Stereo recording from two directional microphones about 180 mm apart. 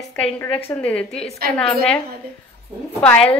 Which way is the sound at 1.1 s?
35° left (ahead or behind).